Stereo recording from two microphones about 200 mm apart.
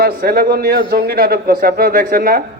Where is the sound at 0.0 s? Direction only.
50° right (ahead or behind).